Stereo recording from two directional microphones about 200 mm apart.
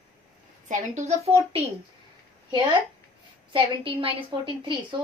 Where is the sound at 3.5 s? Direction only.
25° right (ahead or behind).